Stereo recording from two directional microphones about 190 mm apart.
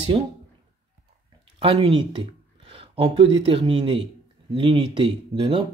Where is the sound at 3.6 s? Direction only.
25° right (ahead or behind).